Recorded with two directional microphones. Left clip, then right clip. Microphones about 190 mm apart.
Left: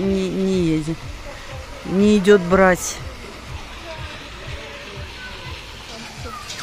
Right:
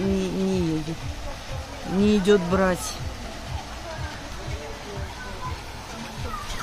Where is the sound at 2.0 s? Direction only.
25° left (ahead or behind).